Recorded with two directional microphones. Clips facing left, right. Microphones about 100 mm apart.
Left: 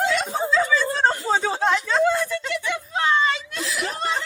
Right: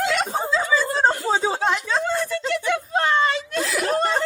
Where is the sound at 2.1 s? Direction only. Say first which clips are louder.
Right 1 dB; 45° right (ahead or behind).